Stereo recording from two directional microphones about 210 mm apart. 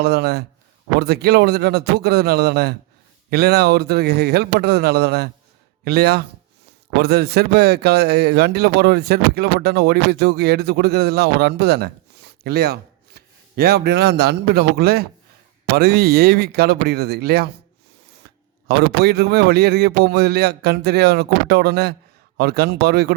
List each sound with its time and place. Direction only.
0.0 s a man's voice: 50° right (ahead or behind)
18.7 s a man's voice: 50° right (ahead or behind)